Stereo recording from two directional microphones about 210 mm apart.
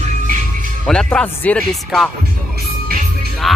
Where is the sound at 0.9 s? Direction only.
5° left (ahead or behind).